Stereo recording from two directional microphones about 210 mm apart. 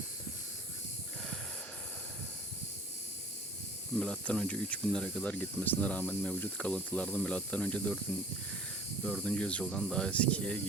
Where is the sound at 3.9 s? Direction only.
5° left (ahead or behind).